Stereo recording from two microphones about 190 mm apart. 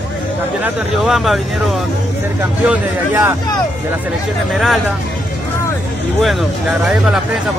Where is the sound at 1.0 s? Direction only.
Centre (ahead or behind).